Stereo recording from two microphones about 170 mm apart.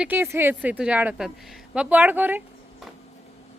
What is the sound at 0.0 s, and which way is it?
A woman's voice, 10° right (ahead or behind).